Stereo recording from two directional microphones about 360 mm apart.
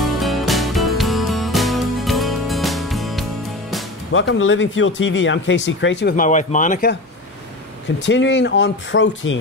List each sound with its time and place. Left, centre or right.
0.0 s music: centre
4.1 s speech: left
8.0 s speech: left